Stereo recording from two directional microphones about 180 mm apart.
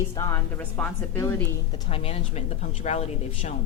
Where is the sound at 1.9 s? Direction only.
35° left (ahead or behind).